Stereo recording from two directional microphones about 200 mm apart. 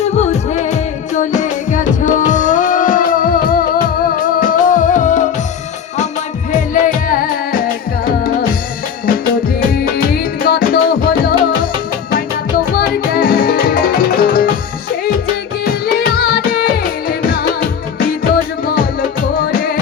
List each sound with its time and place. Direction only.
0.0 s music: 35° left (ahead or behind)
6.5 s music: 40° left (ahead or behind)
9.3 s music: 45° left (ahead or behind)
12.7 s music: 45° left (ahead or behind)
15.6 s music: 50° left (ahead or behind)